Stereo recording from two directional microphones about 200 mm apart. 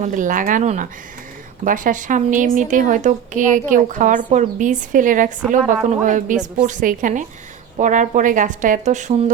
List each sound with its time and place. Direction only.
0.0 s a woman's voice: 40° right (ahead or behind)